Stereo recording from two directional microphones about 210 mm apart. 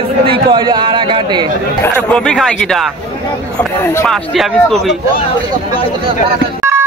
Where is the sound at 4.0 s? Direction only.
5° left (ahead or behind).